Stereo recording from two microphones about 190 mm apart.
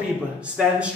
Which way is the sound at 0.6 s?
5° right (ahead or behind).